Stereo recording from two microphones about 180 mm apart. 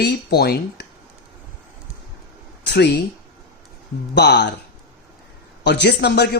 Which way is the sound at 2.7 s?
70° left (ahead or behind).